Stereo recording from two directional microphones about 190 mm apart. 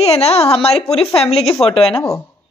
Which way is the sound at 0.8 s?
5° left (ahead or behind).